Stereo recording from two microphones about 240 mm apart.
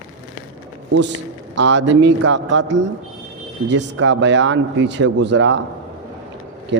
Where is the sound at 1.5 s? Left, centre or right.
Right.